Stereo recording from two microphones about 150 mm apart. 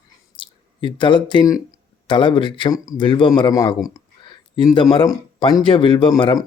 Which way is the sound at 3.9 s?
30° left (ahead or behind).